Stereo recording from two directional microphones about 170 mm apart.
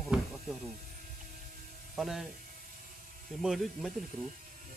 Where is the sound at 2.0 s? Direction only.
Centre (ahead or behind).